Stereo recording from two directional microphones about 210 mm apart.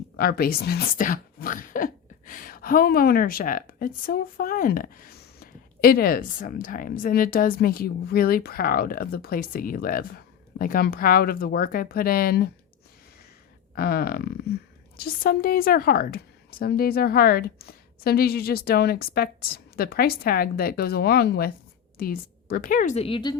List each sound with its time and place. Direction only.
0.2 s speech: 45° left (ahead or behind)
13.7 s a woman's voice: 45° left (ahead or behind); by 23.3 s 25° left (ahead or behind)